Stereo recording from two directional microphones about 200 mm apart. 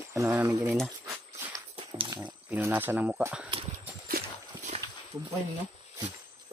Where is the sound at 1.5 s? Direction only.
20° right (ahead or behind).